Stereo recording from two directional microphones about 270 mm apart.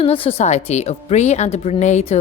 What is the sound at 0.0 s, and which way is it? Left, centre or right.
Speech, left.